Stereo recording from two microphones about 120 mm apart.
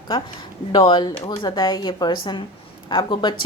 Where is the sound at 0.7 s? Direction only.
40° left (ahead or behind).